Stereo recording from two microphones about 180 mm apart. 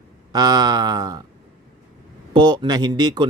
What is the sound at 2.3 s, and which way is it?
Speech, 25° right (ahead or behind).